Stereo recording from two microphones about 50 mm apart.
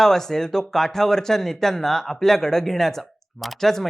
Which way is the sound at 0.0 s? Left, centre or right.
Centre.